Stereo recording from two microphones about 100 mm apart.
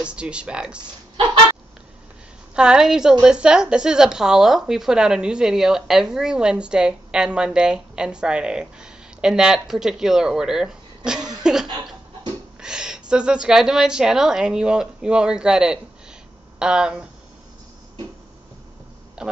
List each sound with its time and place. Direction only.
0.0 s a woman's voice: 10° right (ahead or behind)
2.5 s a woman's voice: 10° right (ahead or behind)
11.6 s a sound: 50° right (ahead or behind)
12.5 s a woman's voice: 5° right (ahead or behind)
19.2 s a man's voice: 5° right (ahead or behind)